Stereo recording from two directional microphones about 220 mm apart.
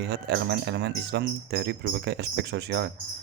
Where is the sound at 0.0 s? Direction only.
50° right (ahead or behind).